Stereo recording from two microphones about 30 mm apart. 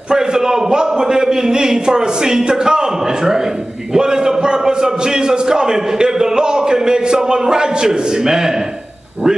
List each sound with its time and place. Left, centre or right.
0.1 s a man's voice: right